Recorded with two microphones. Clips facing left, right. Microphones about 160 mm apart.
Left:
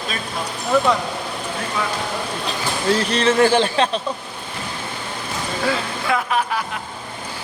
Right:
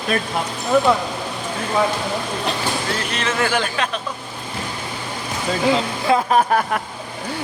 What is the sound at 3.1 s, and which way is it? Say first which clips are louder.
Speech: left 6 dB; 30° left (ahead or behind).